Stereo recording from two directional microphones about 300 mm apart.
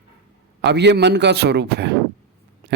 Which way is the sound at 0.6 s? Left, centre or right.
Right.